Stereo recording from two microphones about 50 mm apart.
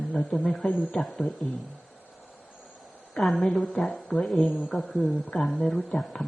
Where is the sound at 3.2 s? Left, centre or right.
Centre.